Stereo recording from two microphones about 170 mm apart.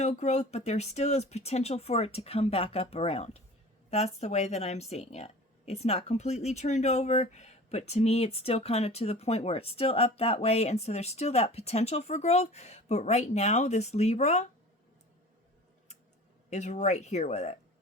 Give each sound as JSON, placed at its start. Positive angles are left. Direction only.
{"t": 0.0, "sound": "speech", "side_deg": 40}
{"t": 16.5, "sound": "speech", "side_deg": 45}